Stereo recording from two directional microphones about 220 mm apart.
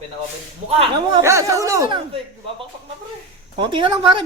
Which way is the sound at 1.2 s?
15° right (ahead or behind).